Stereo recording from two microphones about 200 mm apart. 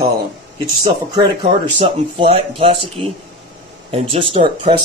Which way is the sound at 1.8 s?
30° right (ahead or behind).